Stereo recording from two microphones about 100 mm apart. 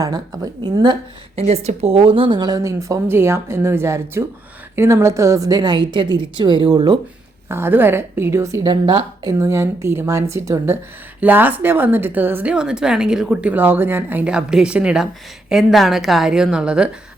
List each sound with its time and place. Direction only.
0.0 s speech: 40° right (ahead or behind)
1.4 s a woman's voice: 90° right; by 2.6 s 50° right (ahead or behind)
2.6 s a woman's voice: 30° right (ahead or behind)
7.4 s speech: 25° right (ahead or behind)
8.6 s speech: 50° right (ahead or behind)
9.4 s speech: 30° right (ahead or behind)
11.2 s a woman's voice: 15° right (ahead or behind)